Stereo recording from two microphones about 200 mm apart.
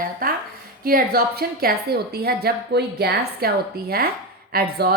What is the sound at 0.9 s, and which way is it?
A woman's voice, 45° right (ahead or behind).